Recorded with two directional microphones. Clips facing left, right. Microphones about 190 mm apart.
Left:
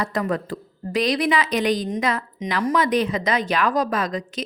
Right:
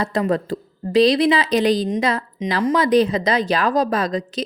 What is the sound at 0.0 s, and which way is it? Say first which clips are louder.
A woman's voice: right 4 dB; 30° right (ahead or behind).